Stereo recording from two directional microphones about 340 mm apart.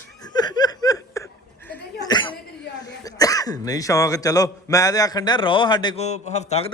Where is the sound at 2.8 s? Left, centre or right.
Centre.